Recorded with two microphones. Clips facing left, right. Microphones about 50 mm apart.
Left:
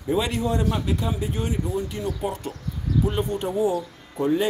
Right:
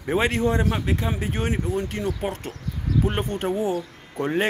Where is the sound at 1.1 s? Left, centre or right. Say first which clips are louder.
Right 1 dB; right.